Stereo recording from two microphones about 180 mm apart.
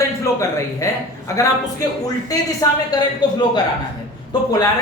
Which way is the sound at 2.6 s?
20° left (ahead or behind).